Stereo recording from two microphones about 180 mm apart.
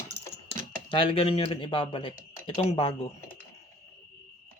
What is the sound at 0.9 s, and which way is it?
Speech, 30° left (ahead or behind).